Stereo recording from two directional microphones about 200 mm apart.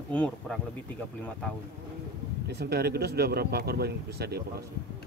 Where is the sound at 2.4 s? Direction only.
55° right (ahead or behind).